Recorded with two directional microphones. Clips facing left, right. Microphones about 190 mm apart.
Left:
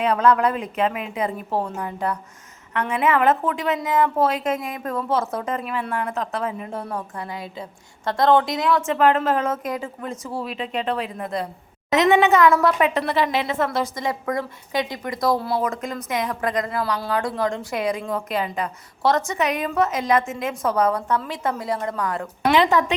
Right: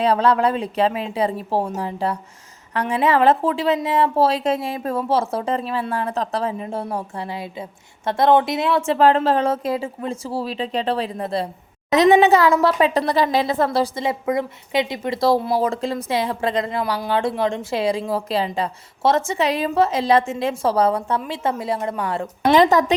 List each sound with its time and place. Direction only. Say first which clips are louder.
0.0 s a woman's voice: right 1 dB; 30° right (ahead or behind)
22.5 s speech: right 4 dB; 40° right (ahead or behind)